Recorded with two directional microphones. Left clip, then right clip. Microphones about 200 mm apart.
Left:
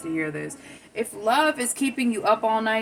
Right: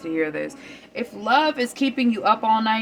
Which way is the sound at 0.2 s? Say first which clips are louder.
Right 4 dB; 45° right (ahead or behind).